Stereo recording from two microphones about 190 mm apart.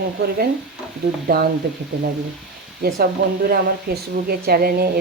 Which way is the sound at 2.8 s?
55° right (ahead or behind).